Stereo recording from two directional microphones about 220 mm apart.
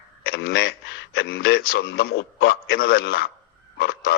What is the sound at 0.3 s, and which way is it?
A man's voice, 45° left (ahead or behind).